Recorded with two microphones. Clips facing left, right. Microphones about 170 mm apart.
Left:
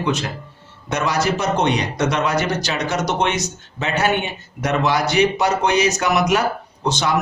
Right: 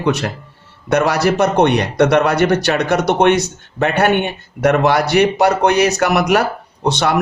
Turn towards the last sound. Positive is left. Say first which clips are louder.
# right 4 dB
turn(degrees=-65)  # may be behind; listen again after turning